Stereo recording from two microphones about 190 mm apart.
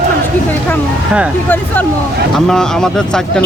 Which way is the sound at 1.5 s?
10° left (ahead or behind).